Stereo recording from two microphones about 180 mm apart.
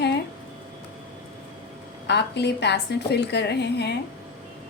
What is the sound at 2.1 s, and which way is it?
A woman's voice, 70° left (ahead or behind).